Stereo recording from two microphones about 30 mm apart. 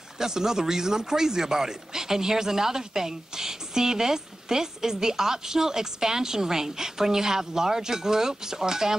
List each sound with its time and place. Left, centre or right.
0.2 s speech: centre